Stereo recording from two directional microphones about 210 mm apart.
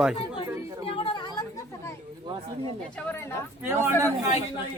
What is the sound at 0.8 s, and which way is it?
Chatter, 25° left (ahead or behind).